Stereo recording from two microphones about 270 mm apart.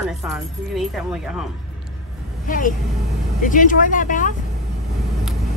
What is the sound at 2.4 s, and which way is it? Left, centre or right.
Speech, left.